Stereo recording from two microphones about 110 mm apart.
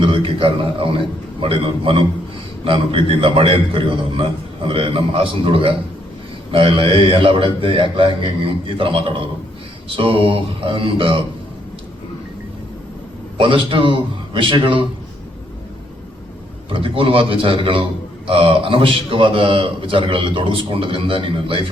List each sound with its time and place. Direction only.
0.0 s a man's voice: 55° right (ahead or behind)
13.3 s a man's voice: 50° right (ahead or behind)
16.6 s a man's voice: 55° right (ahead or behind)